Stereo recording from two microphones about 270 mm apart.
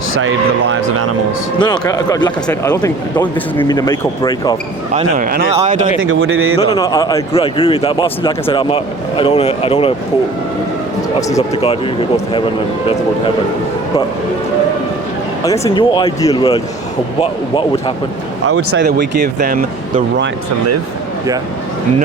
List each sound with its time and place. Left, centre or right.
1.5 s speech: centre
4.9 s speech: right
6.0 s speech: right
6.6 s speech: centre
11.2 s speech: centre
15.4 s speech: centre
18.4 s speech: right
18.8 s speech: right